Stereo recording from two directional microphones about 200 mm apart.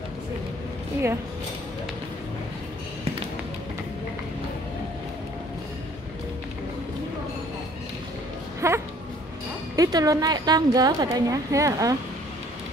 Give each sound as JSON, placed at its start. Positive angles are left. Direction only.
{"t": 8.5, "sound": "music", "side_deg": -15}
{"t": 9.8, "sound": "a woman's voice", "side_deg": -20}